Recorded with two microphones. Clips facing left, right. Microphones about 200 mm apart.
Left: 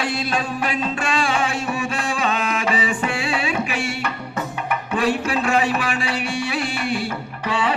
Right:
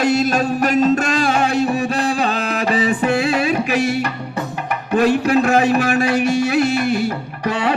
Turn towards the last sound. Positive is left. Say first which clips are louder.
# right 3 dB
turn(degrees=-45)  # may be behind; listen again after turning